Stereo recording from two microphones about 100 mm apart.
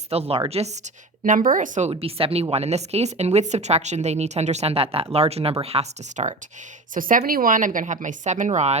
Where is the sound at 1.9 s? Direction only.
75° right (ahead or behind); by 6.3 s 90° right.